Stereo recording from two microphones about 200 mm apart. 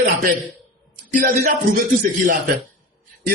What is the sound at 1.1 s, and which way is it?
A man's voice, 45° right (ahead or behind).